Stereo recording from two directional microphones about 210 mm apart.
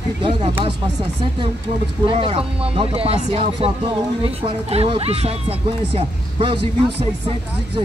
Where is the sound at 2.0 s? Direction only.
25° right (ahead or behind).